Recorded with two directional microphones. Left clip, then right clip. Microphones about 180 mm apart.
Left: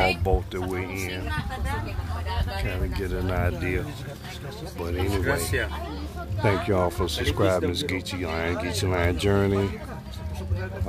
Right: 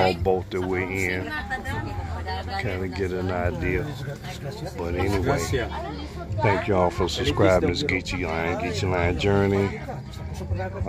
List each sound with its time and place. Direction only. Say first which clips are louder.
0.2 s speech: right 3 dB; 5° left (ahead or behind)
2.6 s speech: right 3 dB; centre (ahead or behind)
3.3 s speech: right 2 dB; 10° left (ahead or behind)
4.8 s speech: right 2 dB; centre (ahead or behind)
6.4 s speech: right 2 dB; 10° left (ahead or behind)